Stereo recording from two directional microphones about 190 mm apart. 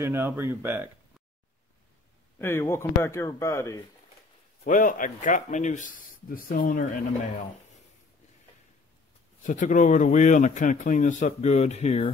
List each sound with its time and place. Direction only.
0.0 s speech: 10° right (ahead or behind)
2.3 s speech: 15° left (ahead or behind)
4.6 s speech: 45° left (ahead or behind)
9.4 s speech: 40° left (ahead or behind)